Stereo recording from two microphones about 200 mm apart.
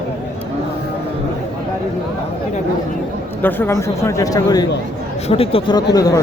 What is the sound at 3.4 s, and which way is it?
Speech, 10° left (ahead or behind).